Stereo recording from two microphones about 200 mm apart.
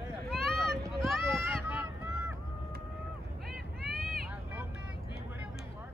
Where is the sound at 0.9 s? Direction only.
Centre (ahead or behind).